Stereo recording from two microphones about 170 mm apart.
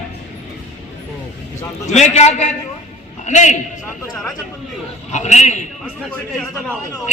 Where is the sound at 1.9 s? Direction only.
40° left (ahead or behind).